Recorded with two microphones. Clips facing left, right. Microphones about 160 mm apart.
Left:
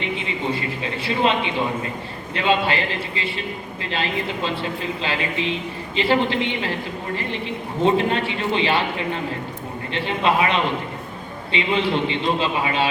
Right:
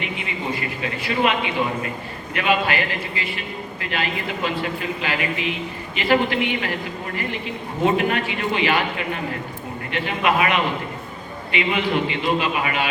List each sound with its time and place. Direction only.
0.0 s a man's voice: 25° left (ahead or behind)
7.9 s a man's voice: 25° left (ahead or behind)